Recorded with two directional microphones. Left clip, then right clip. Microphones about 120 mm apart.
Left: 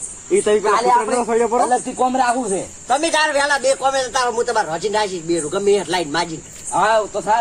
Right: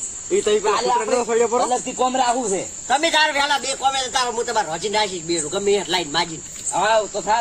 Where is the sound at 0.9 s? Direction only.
5° right (ahead or behind).